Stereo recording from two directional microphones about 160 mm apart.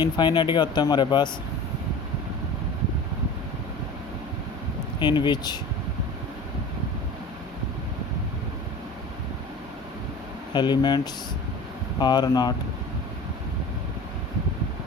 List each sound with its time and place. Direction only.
0.0 s speech: 30° left (ahead or behind)
4.9 s speech: 30° left (ahead or behind)
10.5 s speech: 30° left (ahead or behind)